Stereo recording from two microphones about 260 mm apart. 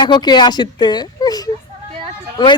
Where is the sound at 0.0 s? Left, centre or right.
Centre.